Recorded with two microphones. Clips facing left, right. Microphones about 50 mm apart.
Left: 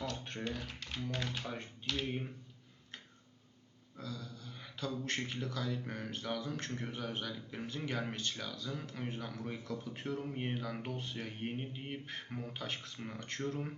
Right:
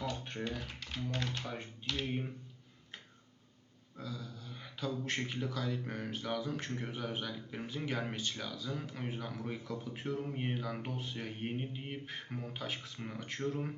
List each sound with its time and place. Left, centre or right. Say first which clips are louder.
0.0 s speech: right 1 dB; centre
3.9 s speech: right 1 dB; centre